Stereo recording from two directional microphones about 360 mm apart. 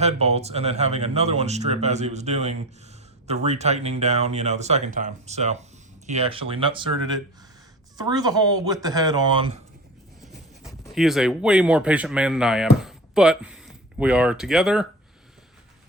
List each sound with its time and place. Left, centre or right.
0.0 s speech: centre
10.2 s speech: centre